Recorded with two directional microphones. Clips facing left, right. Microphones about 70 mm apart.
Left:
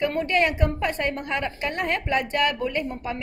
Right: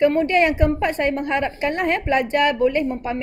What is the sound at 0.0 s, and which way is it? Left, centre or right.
A woman's voice, right.